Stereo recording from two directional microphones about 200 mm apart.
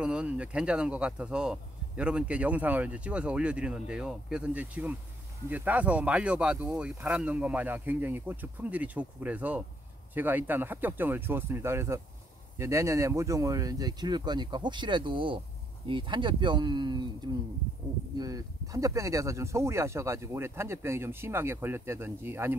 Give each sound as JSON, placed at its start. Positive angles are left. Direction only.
{"t": 0.0, "sound": "speech", "side_deg": -5}
{"t": 18.1, "sound": "speech", "side_deg": -20}